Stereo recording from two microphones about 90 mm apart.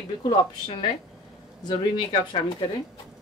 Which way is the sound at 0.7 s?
70° left (ahead or behind).